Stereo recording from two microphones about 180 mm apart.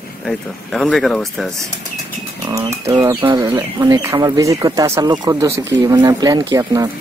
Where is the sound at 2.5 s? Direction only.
20° right (ahead or behind).